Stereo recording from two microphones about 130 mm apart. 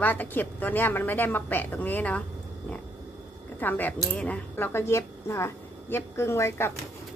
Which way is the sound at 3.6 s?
15° left (ahead or behind).